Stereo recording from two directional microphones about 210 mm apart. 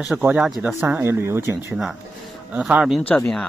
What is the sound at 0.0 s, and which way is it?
Speech, 5° right (ahead or behind).